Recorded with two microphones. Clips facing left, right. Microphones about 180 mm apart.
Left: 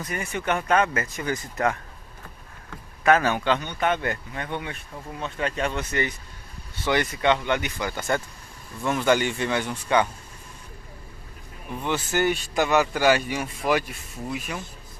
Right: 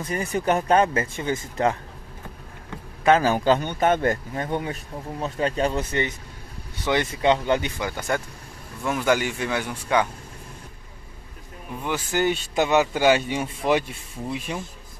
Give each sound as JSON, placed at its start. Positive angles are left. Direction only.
{"t": 0.0, "sound": "a man's voice", "side_deg": -35}
{"t": 3.0, "sound": "a man's voice", "side_deg": -30}
{"t": 7.8, "sound": "speech", "side_deg": -10}
{"t": 11.8, "sound": "speech", "side_deg": -10}